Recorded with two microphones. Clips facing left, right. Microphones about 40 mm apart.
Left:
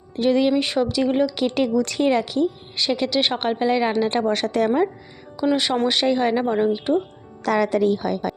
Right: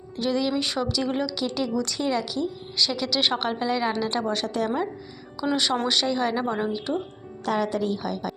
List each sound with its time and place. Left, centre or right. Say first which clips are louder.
0.2 s a woman's voice: left 6 dB; left
1.4 s a woman's voice: left 6 dB; left
3.2 s a woman's voice: left 1 dB; centre; by 4.3 s left
4.3 s a woman's voice: left 6 dB; left
5.5 s speech: left 4 dB; centre
5.9 s speech: left 5 dB; left
6.4 s speech: left 6 dB; centre
6.7 s a woman's voice: left 7 dB; left
7.4 s a woman's voice: left 6 dB; left